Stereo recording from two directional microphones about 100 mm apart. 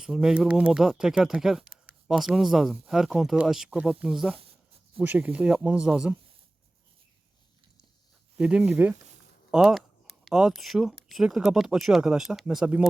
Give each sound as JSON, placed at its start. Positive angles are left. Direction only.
{"t": 0.0, "sound": "speech", "side_deg": -5}
{"t": 5.0, "sound": "speech", "side_deg": -15}
{"t": 8.4, "sound": "speech", "side_deg": -10}